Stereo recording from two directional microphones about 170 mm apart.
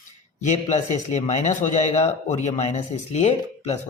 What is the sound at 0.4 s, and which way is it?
A man's voice, 45° left (ahead or behind).